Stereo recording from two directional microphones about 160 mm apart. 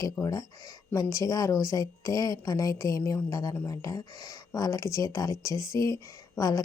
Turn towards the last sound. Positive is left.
turn(degrees=20)  # may be behind; listen again after turning